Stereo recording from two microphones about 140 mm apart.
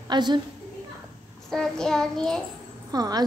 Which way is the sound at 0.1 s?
30° right (ahead or behind).